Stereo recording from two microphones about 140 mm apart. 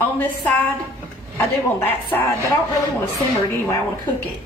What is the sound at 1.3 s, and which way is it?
A woman's voice, 15° left (ahead or behind).